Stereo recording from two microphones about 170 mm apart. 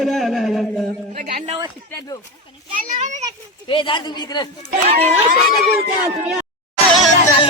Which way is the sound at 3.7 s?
30° left (ahead or behind).